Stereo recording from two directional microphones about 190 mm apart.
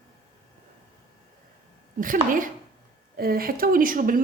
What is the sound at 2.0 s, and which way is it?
A woman's voice, 45° right (ahead or behind).